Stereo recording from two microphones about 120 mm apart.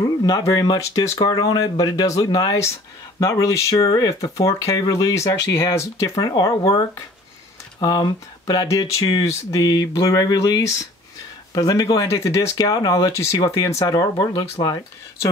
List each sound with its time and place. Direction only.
0.0 s speech: 30° left (ahead or behind)
7.8 s speech: 35° left (ahead or behind)